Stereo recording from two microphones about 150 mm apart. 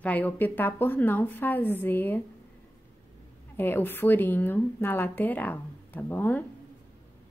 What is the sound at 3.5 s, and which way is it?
A woman's voice, 15° left (ahead or behind).